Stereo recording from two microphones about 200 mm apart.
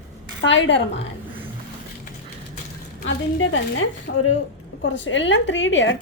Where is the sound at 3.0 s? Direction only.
70° left (ahead or behind).